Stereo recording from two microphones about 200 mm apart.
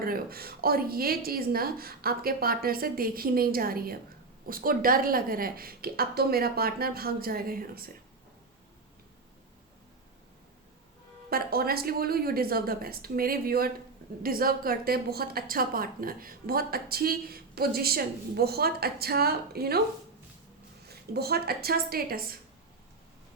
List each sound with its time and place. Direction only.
0.0 s a woman's voice: 50° right (ahead or behind)
11.3 s a woman's voice: 50° right (ahead or behind)
20.8 s a woman's voice: 50° right (ahead or behind)